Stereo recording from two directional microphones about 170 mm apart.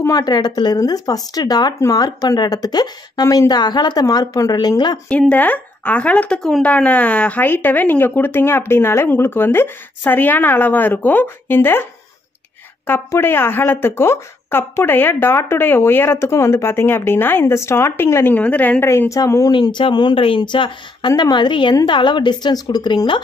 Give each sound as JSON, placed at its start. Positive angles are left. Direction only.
{"t": 0.0, "sound": "speech", "side_deg": 20}
{"t": 5.1, "sound": "speech", "side_deg": 5}